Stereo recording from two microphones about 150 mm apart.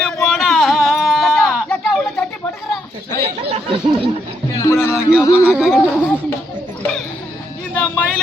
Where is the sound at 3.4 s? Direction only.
40° right (ahead or behind).